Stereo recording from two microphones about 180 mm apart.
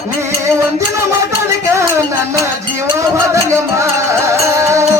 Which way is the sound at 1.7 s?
15° right (ahead or behind).